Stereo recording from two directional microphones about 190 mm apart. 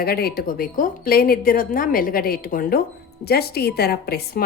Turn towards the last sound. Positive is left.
turn(degrees=55)  # may be behind; listen again after turning